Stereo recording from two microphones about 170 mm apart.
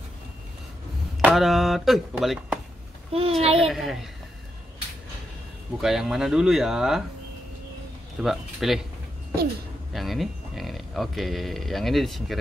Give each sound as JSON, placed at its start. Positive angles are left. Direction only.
{"t": 1.2, "sound": "speech", "side_deg": 0}
{"t": 3.1, "sound": "a child's voice", "side_deg": -35}
{"t": 3.5, "sound": "speech", "side_deg": 0}
{"t": 5.8, "sound": "speech", "side_deg": -5}
{"t": 8.2, "sound": "speech", "side_deg": 0}
{"t": 9.9, "sound": "speech", "side_deg": 0}